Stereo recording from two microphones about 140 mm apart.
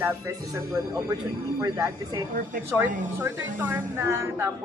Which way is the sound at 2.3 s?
70° right (ahead or behind).